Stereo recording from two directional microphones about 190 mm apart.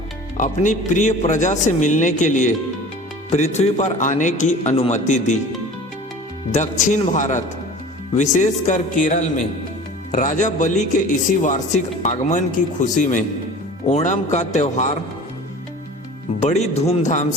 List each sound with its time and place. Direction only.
0.3 s a man's voice: 40° left (ahead or behind)
6.5 s a man's voice: 40° left (ahead or behind)
16.4 s a man's voice: 35° left (ahead or behind)